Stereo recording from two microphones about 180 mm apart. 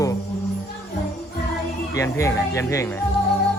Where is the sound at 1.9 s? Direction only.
15° left (ahead or behind).